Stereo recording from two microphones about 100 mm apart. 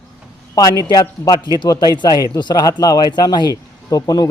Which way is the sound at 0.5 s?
35° left (ahead or behind).